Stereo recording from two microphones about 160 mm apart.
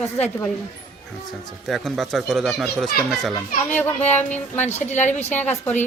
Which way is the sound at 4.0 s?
45° left (ahead or behind).